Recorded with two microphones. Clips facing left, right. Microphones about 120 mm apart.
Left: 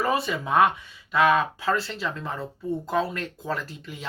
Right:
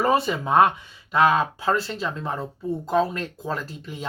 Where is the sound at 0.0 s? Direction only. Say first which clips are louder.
Right 4 dB; 30° right (ahead or behind).